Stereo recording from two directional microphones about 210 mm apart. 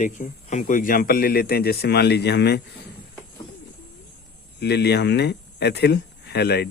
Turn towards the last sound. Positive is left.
turn(degrees=50)  # may be behind; listen again after turning